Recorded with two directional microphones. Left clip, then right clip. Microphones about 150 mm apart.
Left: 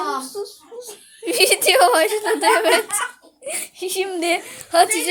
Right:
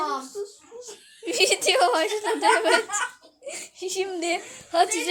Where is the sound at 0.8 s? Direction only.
10° left (ahead or behind).